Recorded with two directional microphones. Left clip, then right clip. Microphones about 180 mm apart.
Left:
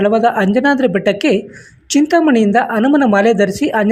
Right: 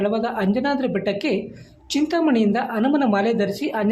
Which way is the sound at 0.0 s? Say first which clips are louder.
Left 10 dB; 35° left (ahead or behind).